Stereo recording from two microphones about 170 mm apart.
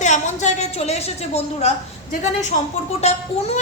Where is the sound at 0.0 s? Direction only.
45° left (ahead or behind).